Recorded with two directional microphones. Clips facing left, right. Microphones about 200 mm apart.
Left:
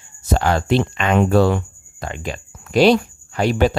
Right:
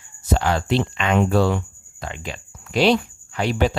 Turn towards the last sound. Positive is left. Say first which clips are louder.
# left 4 dB
turn(degrees=45)  # may be behind; listen again after turning